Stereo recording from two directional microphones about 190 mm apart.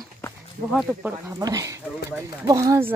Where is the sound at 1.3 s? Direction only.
20° right (ahead or behind).